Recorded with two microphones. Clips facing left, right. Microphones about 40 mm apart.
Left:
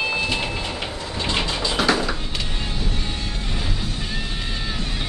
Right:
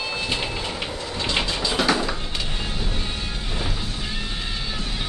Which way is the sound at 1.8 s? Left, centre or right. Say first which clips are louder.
Left 2 dB; centre.